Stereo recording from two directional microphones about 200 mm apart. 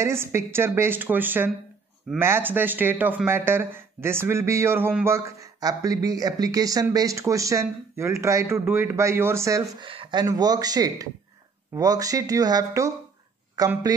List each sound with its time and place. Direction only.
0.0 s speech: 10° right (ahead or behind)